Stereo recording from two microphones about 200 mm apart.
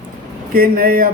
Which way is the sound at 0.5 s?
45° right (ahead or behind).